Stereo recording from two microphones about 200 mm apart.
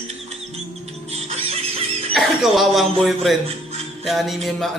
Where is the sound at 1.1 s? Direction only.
30° right (ahead or behind).